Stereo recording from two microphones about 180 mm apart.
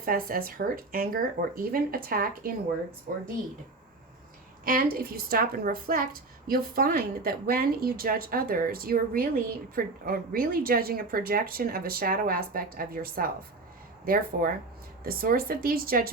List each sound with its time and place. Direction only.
0.0 s speech: 55° right (ahead or behind)
4.6 s a woman's voice: 55° right (ahead or behind)